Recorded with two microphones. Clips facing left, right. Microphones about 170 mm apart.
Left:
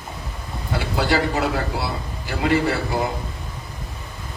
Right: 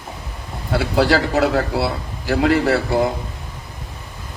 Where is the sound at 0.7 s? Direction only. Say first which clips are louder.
Right 5 dB; 85° right.